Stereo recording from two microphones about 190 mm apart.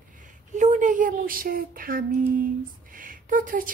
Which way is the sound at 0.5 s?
40° right (ahead or behind).